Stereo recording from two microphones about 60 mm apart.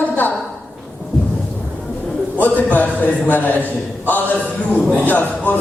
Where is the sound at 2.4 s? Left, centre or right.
Left.